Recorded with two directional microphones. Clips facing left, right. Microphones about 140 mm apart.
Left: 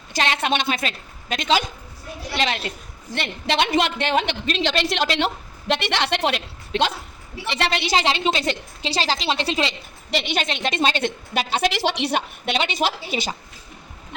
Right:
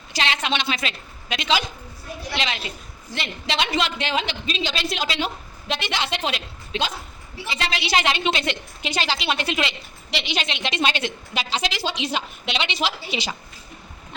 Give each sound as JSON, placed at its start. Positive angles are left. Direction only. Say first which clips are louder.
{"t": 0.1, "sound": "a woman's voice", "louder": "left 3 dB", "side_deg": 45}
{"t": 7.6, "sound": "a woman's voice", "louder": "left 4 dB", "side_deg": 50}
{"t": 7.9, "sound": "a woman's voice", "louder": "even", "side_deg": 30}
{"t": 10.1, "sound": "a woman's voice", "louder": "left 4 dB", "side_deg": 50}
{"t": 11.8, "sound": "a woman's voice", "louder": "left 4 dB", "side_deg": 70}